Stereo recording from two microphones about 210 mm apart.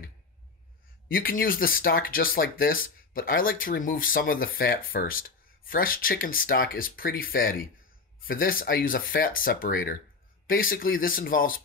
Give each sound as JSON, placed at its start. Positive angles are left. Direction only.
{"t": 1.0, "sound": "speech", "side_deg": 45}